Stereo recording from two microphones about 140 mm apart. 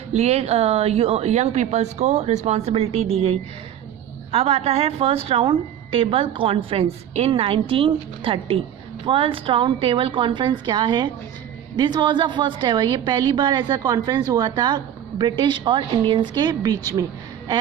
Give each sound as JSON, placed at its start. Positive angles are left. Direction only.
{"t": 0.1, "sound": "a woman's voice", "side_deg": -50}